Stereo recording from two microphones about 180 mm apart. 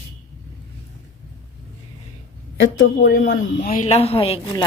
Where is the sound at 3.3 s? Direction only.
80° left.